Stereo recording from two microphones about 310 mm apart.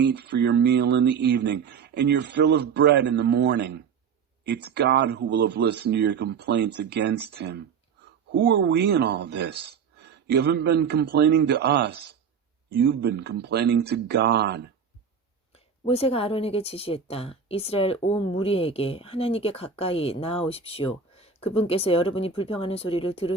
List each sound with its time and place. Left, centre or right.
0.0 s speech: right
15.5 s a woman's voice: centre